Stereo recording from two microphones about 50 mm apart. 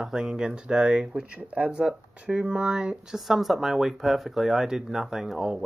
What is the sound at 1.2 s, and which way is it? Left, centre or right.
Speech, right.